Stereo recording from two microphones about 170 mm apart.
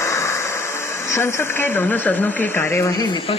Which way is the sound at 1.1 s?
15° left (ahead or behind).